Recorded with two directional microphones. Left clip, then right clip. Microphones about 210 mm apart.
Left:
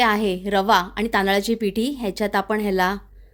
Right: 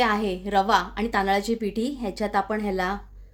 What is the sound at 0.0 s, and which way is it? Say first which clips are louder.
A woman's voice: left 4 dB; 40° left (ahead or behind).